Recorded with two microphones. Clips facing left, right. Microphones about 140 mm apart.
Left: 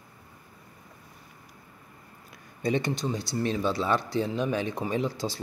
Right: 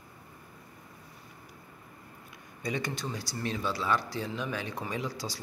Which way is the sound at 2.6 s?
25° left (ahead or behind).